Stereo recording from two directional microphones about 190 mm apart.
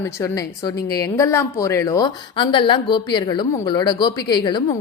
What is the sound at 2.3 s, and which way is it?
A woman's voice, 25° left (ahead or behind).